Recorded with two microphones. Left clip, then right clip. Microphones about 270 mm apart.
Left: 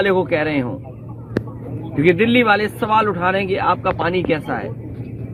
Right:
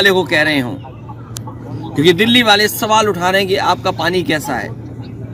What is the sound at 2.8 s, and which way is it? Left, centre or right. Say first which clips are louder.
Speech: right 3 dB; right.